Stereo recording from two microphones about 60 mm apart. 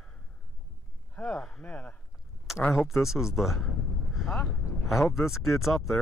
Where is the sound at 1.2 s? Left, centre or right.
Left.